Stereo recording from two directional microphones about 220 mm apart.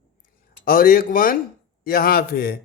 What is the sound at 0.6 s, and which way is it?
A man's voice, 40° left (ahead or behind).